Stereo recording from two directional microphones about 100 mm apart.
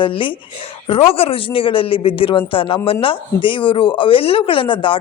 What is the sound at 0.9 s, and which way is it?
Speech, 70° left (ahead or behind).